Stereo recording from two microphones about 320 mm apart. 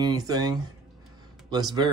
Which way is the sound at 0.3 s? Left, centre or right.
Centre.